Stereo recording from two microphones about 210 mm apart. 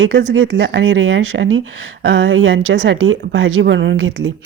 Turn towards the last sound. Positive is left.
turn(degrees=-70)  # may be behind; listen again after turning